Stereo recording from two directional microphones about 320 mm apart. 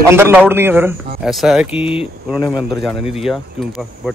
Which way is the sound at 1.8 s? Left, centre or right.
Centre.